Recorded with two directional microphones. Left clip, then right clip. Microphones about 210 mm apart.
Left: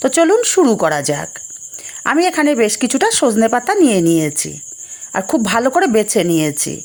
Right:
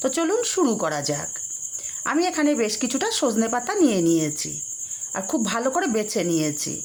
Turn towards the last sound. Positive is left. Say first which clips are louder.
# left 8 dB
turn(degrees=30)  # may be behind; listen again after turning